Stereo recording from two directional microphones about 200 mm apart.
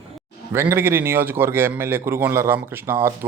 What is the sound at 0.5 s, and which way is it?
A man's voice, 10° right (ahead or behind).